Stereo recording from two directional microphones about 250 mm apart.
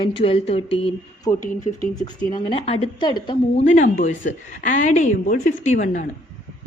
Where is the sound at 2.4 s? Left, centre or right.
Left.